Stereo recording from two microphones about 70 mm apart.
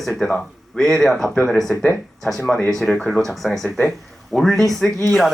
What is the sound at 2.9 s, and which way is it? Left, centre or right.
Speech, centre.